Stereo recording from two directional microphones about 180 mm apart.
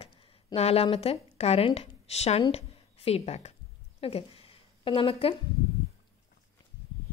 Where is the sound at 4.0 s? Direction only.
30° left (ahead or behind).